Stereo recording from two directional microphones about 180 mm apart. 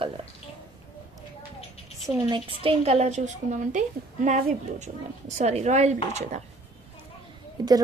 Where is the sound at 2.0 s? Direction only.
30° right (ahead or behind).